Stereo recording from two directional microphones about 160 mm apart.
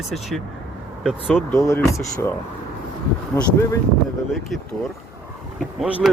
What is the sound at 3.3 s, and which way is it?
Speech, 15° left (ahead or behind).